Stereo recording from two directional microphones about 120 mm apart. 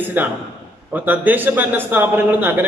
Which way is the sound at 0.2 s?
15° right (ahead or behind).